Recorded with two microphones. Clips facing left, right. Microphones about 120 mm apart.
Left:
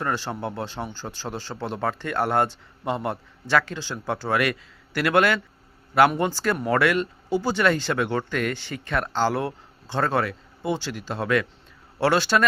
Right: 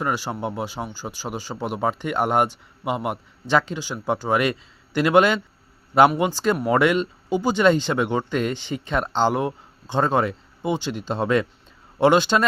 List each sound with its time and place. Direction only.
0.0 s speech: 10° right (ahead or behind)